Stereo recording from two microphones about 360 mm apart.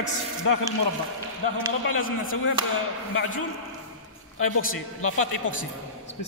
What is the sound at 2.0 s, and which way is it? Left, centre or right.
Speech, left.